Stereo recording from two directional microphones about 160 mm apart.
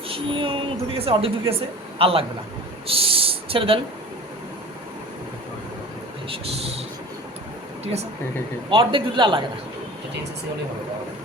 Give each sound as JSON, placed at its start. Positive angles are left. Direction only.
{"t": 0.1, "sound": "a woman's voice", "side_deg": -35}
{"t": 2.8, "sound": "owl", "side_deg": -35}
{"t": 6.2, "sound": "vehicle", "side_deg": -35}
{"t": 8.7, "sound": "a man's voice", "side_deg": -30}